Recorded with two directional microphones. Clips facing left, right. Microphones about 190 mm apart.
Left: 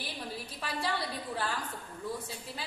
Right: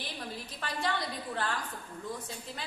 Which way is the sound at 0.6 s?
5° left (ahead or behind).